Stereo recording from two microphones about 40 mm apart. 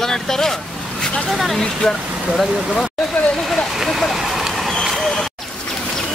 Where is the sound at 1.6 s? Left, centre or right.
Centre.